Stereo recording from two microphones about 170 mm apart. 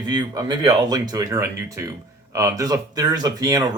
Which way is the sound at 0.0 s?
25° right (ahead or behind).